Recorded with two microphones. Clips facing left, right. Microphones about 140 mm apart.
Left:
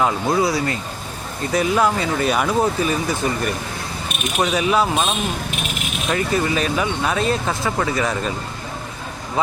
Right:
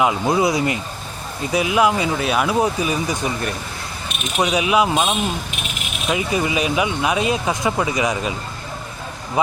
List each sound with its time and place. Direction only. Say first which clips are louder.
0.0 s speech: right 1 dB; 15° right (ahead or behind)
1.5 s speech: right 1 dB; 10° right (ahead or behind)